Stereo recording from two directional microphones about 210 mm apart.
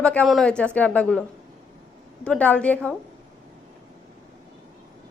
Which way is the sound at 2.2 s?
5° left (ahead or behind).